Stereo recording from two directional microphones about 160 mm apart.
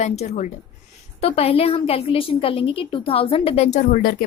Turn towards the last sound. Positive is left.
turn(degrees=65)  # may be behind; listen again after turning